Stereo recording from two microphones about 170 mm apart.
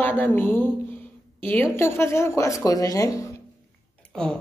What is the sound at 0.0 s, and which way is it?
Speech, 10° left (ahead or behind).